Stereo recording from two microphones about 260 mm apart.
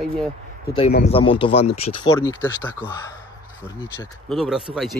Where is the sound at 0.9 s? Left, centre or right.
Left.